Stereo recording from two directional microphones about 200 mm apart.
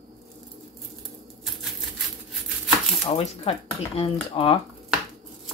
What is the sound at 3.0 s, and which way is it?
Speech, 30° left (ahead or behind).